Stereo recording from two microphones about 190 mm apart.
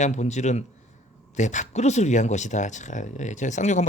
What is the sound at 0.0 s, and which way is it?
A woman's voice, 35° left (ahead or behind).